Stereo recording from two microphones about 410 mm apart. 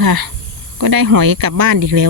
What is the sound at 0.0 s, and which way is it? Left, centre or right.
Speech, right.